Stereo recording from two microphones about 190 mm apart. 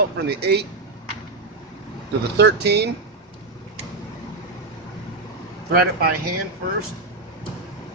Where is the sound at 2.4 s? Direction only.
60° right (ahead or behind).